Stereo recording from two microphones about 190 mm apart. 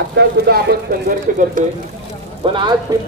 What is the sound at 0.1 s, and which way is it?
Speech, 60° right (ahead or behind).